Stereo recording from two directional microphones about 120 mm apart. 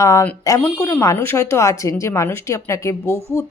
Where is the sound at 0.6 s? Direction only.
10° left (ahead or behind).